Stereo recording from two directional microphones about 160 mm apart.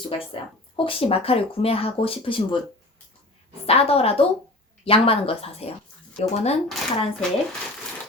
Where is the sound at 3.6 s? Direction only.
40° left (ahead or behind).